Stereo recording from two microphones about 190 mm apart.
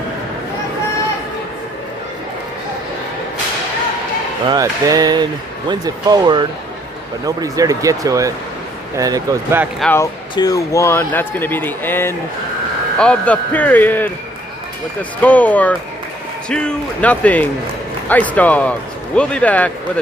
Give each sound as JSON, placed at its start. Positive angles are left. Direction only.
{"t": 4.4, "sound": "speech", "side_deg": -20}
{"t": 9.8, "sound": "speech", "side_deg": 10}
{"t": 15.2, "sound": "speech", "side_deg": 10}